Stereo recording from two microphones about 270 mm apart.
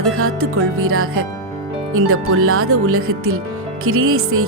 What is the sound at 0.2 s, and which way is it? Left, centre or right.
Speech, right.